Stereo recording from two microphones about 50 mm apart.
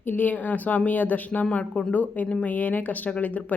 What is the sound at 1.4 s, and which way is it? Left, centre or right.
Speech, left.